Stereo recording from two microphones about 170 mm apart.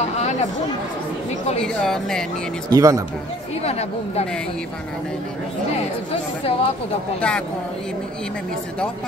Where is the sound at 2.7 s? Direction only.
20° right (ahead or behind).